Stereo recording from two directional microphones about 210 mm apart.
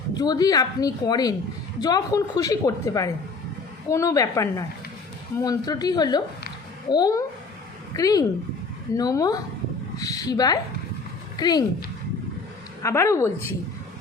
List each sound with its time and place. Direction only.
0.2 s a woman's voice: 20° left (ahead or behind)
12.8 s a woman's voice: 15° left (ahead or behind)